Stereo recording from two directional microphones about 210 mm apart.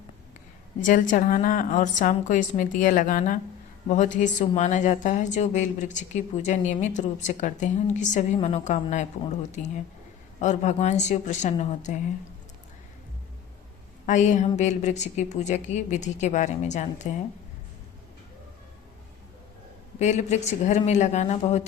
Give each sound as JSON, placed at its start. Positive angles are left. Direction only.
{"t": 0.8, "sound": "a woman's voice", "side_deg": 40}
{"t": 14.1, "sound": "a woman's voice", "side_deg": 35}
{"t": 20.0, "sound": "a woman's voice", "side_deg": 35}